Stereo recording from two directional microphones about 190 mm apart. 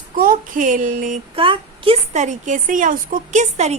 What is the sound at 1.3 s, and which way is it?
A woman's voice, 30° right (ahead or behind).